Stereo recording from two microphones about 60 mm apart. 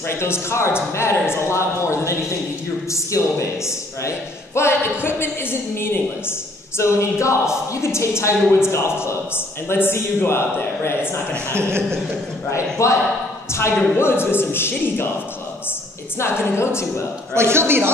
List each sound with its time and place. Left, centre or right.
0.2 s a woman's voice: left
4.6 s a woman's voice: left
6.8 s a woman's voice: left
11.5 s a man's voice: right
12.4 s a woman's voice: left
16.2 s a woman's voice: left
17.3 s a man's voice: right